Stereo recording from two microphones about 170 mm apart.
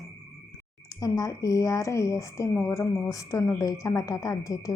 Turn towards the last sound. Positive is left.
turn(degrees=20)  # may be behind; listen again after turning